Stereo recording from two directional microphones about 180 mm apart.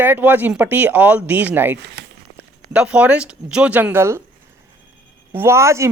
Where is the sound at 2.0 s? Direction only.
65° right (ahead or behind).